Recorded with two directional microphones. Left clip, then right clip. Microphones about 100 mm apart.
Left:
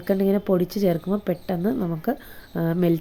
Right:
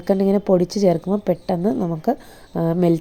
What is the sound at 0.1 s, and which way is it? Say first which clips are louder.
Speech: right 4 dB; 25° right (ahead or behind).